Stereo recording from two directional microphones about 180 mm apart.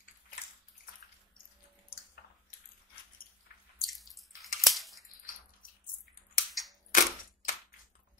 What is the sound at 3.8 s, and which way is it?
Drip, centre (ahead or behind).